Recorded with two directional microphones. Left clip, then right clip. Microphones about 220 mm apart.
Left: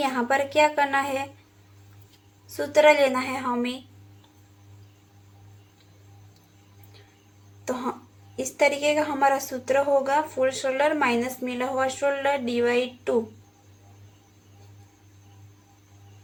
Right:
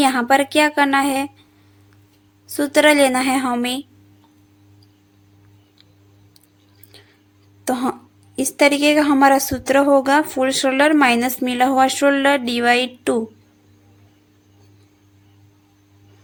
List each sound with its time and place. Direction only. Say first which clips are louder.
0.0 s a woman's voice: right 8 dB; 50° right (ahead or behind)
2.5 s a woman's voice: right 4 dB; 50° right (ahead or behind)
7.6 s a woman's voice: right 8 dB; 55° right (ahead or behind)